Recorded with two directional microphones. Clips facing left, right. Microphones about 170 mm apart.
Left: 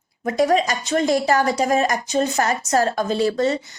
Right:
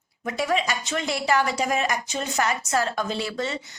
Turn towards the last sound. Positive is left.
turn(degrees=40)  # may be behind; listen again after turning